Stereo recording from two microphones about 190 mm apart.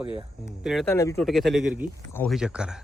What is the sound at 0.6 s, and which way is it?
Speech, centre (ahead or behind).